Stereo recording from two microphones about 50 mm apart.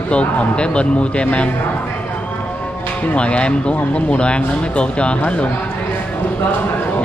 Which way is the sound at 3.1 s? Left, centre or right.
Left.